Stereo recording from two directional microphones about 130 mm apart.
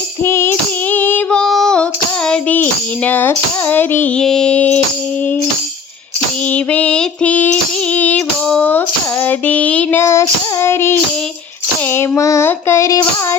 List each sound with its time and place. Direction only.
0.3 s female singing: 20° left (ahead or behind)
6.5 s female singing: 10° left (ahead or behind)
10.0 s child singing: 20° left (ahead or behind)
11.9 s child singing: 20° left (ahead or behind)